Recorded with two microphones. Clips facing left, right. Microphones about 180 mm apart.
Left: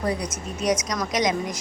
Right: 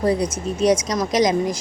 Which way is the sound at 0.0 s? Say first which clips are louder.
Right 7 dB; 30° right (ahead or behind).